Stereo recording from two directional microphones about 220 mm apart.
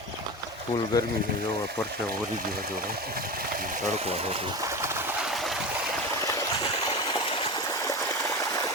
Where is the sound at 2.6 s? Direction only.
45° right (ahead or behind); by 4.5 s 25° right (ahead or behind).